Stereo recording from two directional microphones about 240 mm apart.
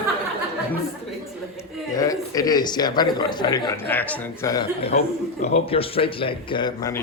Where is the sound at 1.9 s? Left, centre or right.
Centre.